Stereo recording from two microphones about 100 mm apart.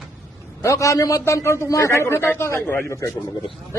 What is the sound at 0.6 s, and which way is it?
A man's voice, 30° left (ahead or behind).